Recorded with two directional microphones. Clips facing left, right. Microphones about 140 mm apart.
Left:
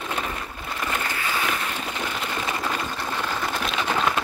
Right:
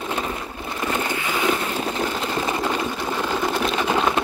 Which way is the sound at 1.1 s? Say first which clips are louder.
Right 5 dB; 20° right (ahead or behind).